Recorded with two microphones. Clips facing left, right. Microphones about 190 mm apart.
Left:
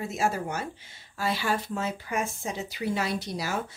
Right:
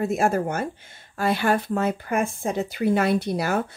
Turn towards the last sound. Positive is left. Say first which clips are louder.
# right 8 dB
turn(degrees=-55)  # may be behind; listen again after turning